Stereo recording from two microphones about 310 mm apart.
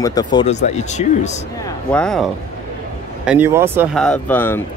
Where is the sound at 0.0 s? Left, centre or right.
Centre.